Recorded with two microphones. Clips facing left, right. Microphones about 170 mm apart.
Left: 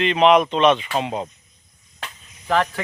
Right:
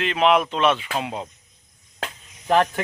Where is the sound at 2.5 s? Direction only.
20° right (ahead or behind).